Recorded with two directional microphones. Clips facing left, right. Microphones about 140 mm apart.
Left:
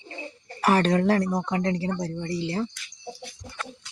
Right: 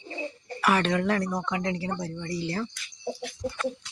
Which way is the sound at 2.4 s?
25° left (ahead or behind).